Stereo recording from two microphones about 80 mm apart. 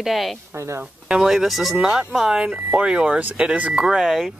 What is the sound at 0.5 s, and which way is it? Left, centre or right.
Speech, right.